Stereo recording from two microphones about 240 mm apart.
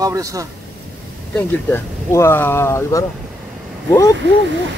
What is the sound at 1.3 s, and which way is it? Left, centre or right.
Speech, centre.